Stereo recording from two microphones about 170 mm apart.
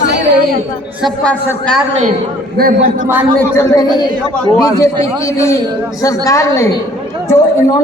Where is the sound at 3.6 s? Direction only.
25° left (ahead or behind).